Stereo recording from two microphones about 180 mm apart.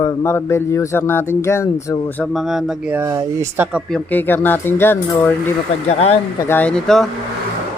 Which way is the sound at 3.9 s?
10° left (ahead or behind).